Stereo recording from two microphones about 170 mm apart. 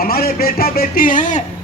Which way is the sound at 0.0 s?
60° left (ahead or behind).